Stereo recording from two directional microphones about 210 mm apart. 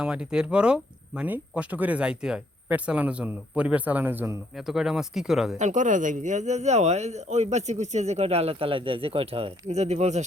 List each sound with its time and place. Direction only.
0.0 s speech: 5° right (ahead or behind)
5.5 s speech: 35° right (ahead or behind)